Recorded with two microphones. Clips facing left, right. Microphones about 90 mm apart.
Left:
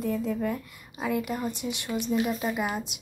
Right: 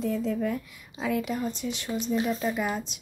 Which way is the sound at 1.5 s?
60° left (ahead or behind).